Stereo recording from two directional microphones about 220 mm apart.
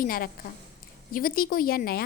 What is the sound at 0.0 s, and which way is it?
A woman's voice, 40° left (ahead or behind).